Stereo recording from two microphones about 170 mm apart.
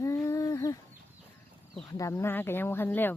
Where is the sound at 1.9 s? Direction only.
20° left (ahead or behind).